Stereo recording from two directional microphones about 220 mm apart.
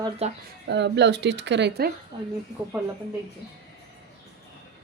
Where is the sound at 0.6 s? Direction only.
50° right (ahead or behind).